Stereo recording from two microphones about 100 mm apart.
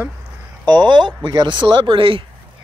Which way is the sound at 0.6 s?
50° right (ahead or behind).